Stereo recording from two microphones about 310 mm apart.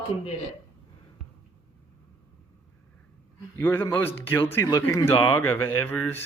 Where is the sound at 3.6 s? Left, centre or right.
Centre.